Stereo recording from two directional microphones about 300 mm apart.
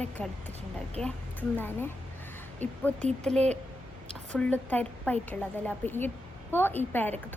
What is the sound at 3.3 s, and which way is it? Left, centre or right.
Speech, right.